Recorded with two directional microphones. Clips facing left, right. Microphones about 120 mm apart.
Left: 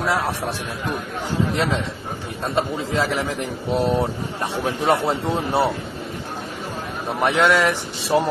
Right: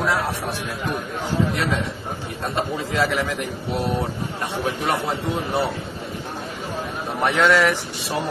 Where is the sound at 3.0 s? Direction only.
25° left (ahead or behind).